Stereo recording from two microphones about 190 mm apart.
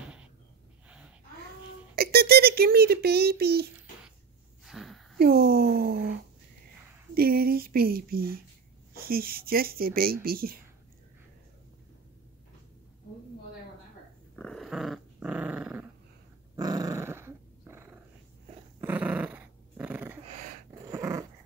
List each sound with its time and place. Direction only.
2.0 s a child's voice: 55° right (ahead or behind)
4.6 s a sound: centre (ahead or behind)
5.2 s speech: 55° right (ahead or behind)
7.2 s speech: 50° right (ahead or behind)
14.3 s dog: 5° left (ahead or behind)
16.5 s dog: 20° right (ahead or behind)